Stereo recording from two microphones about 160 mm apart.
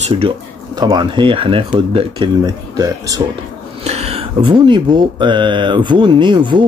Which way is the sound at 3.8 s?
40° right (ahead or behind).